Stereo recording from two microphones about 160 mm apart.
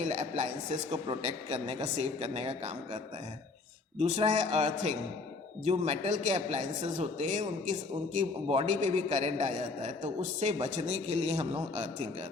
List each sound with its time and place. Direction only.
0.0 s a man's voice: 50° right (ahead or behind)